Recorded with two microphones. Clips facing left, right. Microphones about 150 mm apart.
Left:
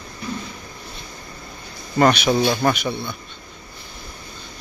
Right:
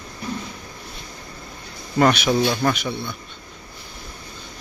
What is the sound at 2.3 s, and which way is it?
Speech, 15° left (ahead or behind).